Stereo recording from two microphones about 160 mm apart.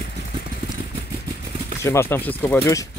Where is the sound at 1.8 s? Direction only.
15° left (ahead or behind).